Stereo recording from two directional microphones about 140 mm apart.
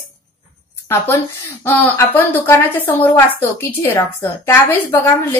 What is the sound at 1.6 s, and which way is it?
A woman's voice, 15° left (ahead or behind).